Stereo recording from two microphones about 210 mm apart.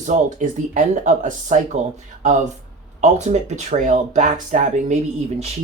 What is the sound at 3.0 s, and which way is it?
Speech, 35° right (ahead or behind).